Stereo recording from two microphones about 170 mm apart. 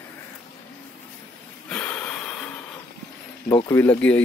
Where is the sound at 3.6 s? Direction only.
10° left (ahead or behind).